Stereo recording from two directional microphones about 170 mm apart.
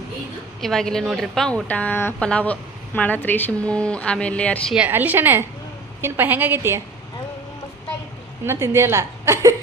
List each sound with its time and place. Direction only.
0.6 s speech: centre (ahead or behind)
4.7 s a woman's voice: 10° right (ahead or behind)
8.4 s a woman's voice: 15° right (ahead or behind)